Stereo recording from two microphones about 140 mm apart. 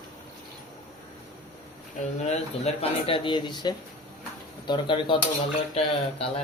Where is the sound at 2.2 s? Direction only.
50° left (ahead or behind).